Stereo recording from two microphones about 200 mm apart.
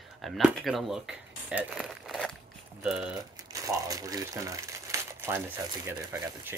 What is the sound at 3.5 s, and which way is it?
Speech, 15° right (ahead or behind).